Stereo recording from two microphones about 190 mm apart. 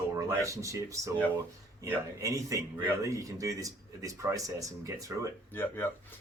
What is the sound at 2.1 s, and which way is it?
Speech, 15° right (ahead or behind).